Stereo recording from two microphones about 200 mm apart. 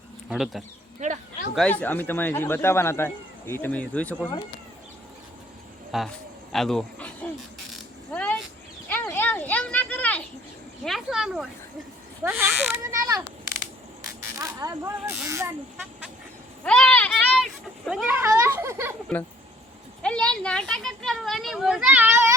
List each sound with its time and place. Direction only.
0.3 s speech: centre (ahead or behind)
0.9 s speech: 35° right (ahead or behind)
1.5 s speech: 5° left (ahead or behind)
5.9 s speech: centre (ahead or behind)
8.1 s a sound: 10° left (ahead or behind)
10.8 s speech: centre (ahead or behind)
14.3 s speech: 15° right (ahead or behind)
16.6 s a sound: 5° left (ahead or behind); by 18.9 s 10° right (ahead or behind)
20.0 s speech: 5° left (ahead or behind); by 22.4 s 10° right (ahead or behind)